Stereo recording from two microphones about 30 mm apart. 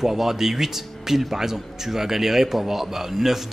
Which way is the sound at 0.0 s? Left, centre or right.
Centre.